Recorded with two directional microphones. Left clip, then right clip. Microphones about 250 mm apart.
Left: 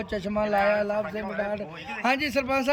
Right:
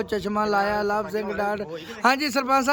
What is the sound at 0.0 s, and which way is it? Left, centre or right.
A man's voice, centre.